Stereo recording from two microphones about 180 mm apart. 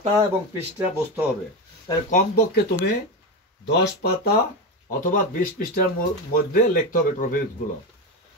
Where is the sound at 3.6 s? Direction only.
70° left (ahead or behind).